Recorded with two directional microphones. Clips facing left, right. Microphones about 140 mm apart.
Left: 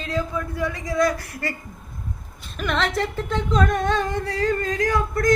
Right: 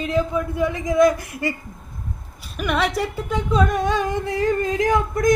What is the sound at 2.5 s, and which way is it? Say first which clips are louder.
A woman's voice: right 2 dB; 10° right (ahead or behind).